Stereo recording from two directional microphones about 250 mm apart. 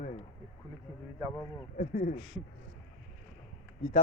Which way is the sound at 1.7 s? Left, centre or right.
Left.